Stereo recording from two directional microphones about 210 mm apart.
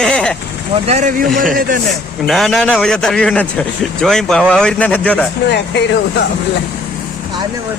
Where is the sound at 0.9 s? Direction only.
35° right (ahead or behind).